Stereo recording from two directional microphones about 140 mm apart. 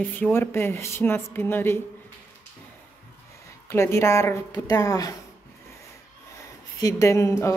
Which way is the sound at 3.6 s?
20° left (ahead or behind).